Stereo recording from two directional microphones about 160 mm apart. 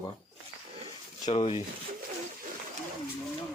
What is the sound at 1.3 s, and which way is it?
Speech, 40° left (ahead or behind).